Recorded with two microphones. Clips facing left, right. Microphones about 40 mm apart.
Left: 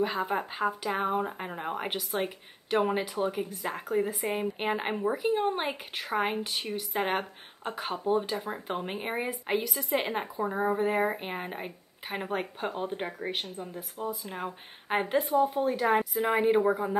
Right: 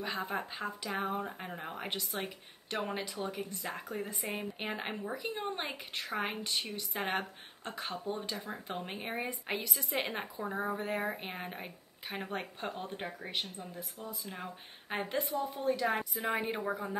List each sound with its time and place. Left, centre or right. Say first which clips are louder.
0.0 s speech: left 7 dB; centre